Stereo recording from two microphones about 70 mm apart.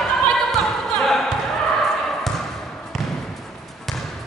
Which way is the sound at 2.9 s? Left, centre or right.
Centre.